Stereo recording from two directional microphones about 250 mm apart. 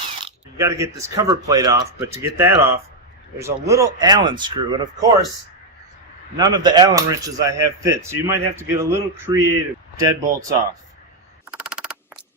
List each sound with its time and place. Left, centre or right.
0.2 s speech: centre
6.3 s speech: centre
11.5 s crow: centre